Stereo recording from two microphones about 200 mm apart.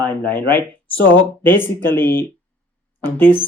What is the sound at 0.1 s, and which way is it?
Speech, 10° left (ahead or behind).